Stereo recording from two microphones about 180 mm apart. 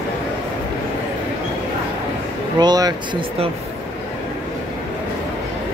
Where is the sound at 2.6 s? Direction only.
20° right (ahead or behind).